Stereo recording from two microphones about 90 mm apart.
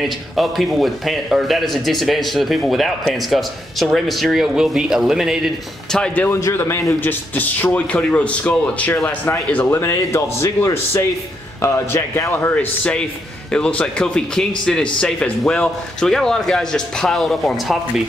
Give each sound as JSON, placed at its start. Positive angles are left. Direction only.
{"t": 0.4, "sound": "speech", "side_deg": 0}
{"t": 5.9, "sound": "a man's voice", "side_deg": 10}
{"t": 6.4, "sound": "a man's voice", "side_deg": 25}
{"t": 9.7, "sound": "speech", "side_deg": 30}
{"t": 13.5, "sound": "a man's voice", "side_deg": 10}